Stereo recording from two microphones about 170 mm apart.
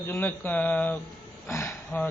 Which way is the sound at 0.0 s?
15° left (ahead or behind).